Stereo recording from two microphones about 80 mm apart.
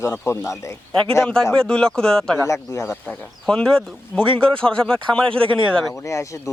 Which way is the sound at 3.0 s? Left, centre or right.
Centre.